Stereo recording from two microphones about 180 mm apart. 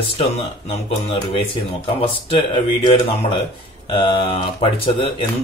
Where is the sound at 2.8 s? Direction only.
30° left (ahead or behind).